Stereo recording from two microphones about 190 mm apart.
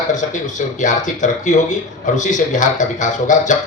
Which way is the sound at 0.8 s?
40° left (ahead or behind).